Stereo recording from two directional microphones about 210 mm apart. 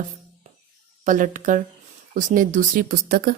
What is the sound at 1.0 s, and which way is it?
Speech, 40° right (ahead or behind).